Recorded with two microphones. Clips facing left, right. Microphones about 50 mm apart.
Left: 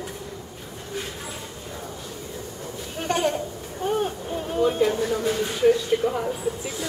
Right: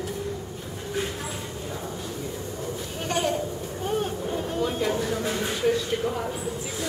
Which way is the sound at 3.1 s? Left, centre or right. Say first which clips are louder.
Left 3 dB; centre.